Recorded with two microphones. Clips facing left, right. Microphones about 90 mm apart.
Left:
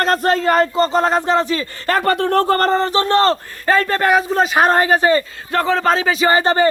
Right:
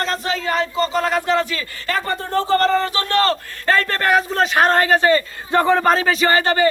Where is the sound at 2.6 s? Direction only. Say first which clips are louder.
Left 3 dB; 35° left (ahead or behind).